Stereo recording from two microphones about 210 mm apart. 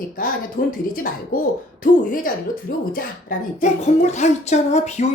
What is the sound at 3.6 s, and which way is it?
A woman's voice, 35° left (ahead or behind).